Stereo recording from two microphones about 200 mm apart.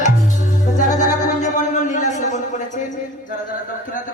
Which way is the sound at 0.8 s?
40° left (ahead or behind).